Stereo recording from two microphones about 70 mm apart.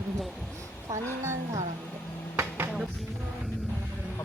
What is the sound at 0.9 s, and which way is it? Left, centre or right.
Speech, right.